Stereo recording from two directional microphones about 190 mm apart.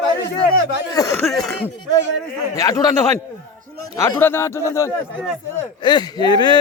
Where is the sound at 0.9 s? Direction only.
20° left (ahead or behind).